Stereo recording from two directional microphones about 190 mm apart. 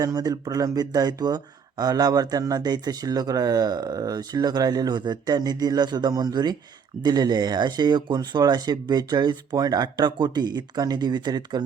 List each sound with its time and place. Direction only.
0.0 s speech: 20° right (ahead or behind)